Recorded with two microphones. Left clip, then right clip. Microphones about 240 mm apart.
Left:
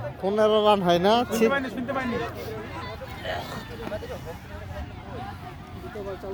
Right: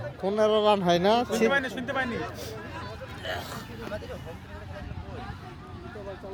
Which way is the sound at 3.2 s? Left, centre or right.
Right.